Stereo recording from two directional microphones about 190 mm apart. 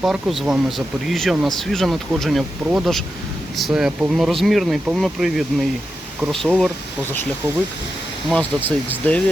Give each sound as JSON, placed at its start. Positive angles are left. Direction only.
{"t": 0.0, "sound": "speech", "side_deg": 0}
{"t": 8.3, "sound": "speech", "side_deg": 10}